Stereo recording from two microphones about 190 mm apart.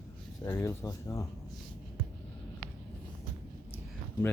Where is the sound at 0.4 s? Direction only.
15° left (ahead or behind).